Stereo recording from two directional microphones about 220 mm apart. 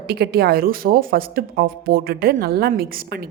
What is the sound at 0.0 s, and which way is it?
Speech, 45° right (ahead or behind).